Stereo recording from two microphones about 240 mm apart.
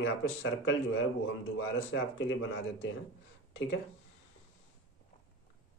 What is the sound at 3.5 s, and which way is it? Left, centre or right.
Speech, left.